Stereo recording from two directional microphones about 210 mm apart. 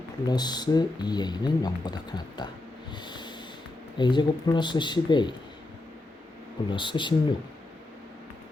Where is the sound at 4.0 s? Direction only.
20° left (ahead or behind).